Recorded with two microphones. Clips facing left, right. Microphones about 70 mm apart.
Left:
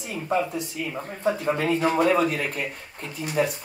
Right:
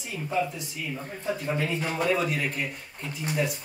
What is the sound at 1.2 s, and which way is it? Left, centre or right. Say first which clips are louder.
Speech: left 6 dB; left.